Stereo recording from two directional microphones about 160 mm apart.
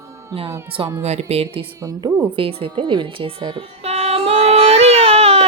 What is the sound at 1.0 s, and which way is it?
Speech, 40° right (ahead or behind).